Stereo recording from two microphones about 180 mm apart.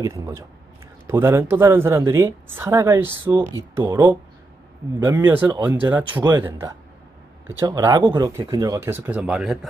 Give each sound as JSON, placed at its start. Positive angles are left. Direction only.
{"t": 0.0, "sound": "a woman's voice", "side_deg": -15}
{"t": 3.8, "sound": "speech", "side_deg": -25}
{"t": 5.0, "sound": "a woman's voice", "side_deg": -15}